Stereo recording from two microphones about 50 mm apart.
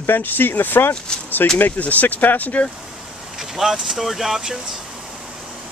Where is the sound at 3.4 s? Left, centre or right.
Centre.